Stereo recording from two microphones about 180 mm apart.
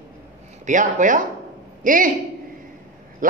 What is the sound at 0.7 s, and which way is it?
A woman's voice, 45° right (ahead or behind).